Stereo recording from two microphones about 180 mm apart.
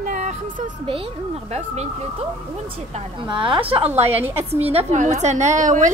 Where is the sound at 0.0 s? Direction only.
45° right (ahead or behind).